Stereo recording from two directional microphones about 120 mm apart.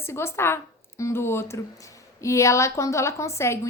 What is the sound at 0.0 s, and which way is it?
A woman's voice, 20° left (ahead or behind).